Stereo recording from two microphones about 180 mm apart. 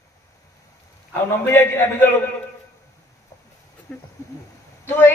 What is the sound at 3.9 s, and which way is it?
A man's voice, 10° left (ahead or behind).